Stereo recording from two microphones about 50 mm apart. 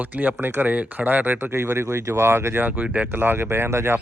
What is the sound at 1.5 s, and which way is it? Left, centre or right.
Speech, right.